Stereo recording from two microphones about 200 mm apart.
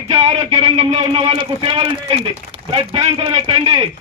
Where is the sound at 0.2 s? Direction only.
30° right (ahead or behind).